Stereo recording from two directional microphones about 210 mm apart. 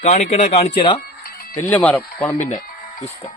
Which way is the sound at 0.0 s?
30° left (ahead or behind).